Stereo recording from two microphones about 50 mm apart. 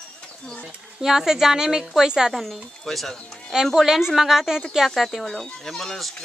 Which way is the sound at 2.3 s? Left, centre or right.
Centre.